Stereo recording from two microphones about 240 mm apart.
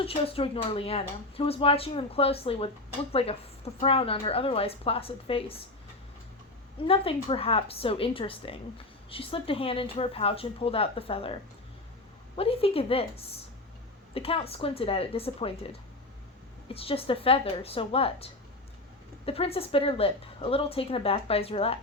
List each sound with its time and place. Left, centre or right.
0.0 s speech: left
6.8 s speech: left
12.4 s speech: left
16.7 s speech: left